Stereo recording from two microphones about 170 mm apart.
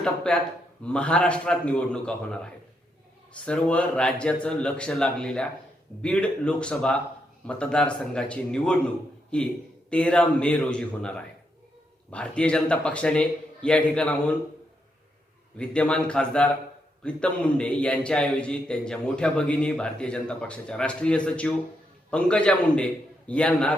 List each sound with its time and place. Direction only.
0.3 s a man's voice: 5° left (ahead or behind)
9.9 s speech: 5° left (ahead or behind)
12.1 s a man's voice: 5° left (ahead or behind)
15.5 s a man's voice: 5° left (ahead or behind)